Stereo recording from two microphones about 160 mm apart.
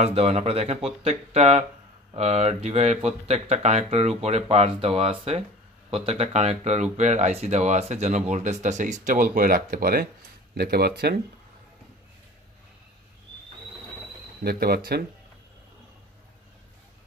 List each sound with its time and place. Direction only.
0.0 s speech: 40° right (ahead or behind); by 10.0 s 65° right (ahead or behind)
10.5 s speech: 80° right
14.4 s speech: 75° right (ahead or behind)